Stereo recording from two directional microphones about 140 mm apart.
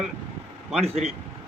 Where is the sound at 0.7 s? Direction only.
50° right (ahead or behind).